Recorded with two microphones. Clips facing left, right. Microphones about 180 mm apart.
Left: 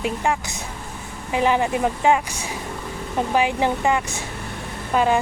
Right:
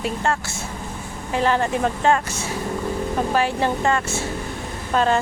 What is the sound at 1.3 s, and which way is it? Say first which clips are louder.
Speech: left 1 dB; 15° left (ahead or behind).